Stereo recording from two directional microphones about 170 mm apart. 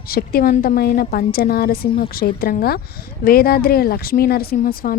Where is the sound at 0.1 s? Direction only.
60° left (ahead or behind).